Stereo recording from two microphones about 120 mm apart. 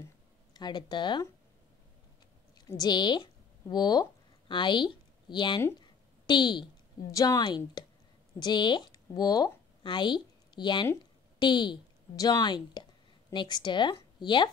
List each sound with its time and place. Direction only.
0.5 s speech: 35° left (ahead or behind)
2.7 s speech: 35° left (ahead or behind)
5.8 s a sound: 40° left (ahead or behind)
7.1 s a woman's voice: 30° left (ahead or behind)